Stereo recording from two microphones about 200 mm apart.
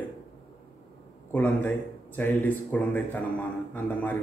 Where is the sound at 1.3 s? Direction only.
10° left (ahead or behind).